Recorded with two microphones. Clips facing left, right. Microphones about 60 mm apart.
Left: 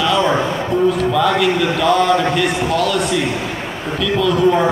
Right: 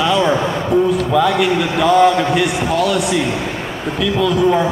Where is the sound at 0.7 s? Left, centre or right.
Centre.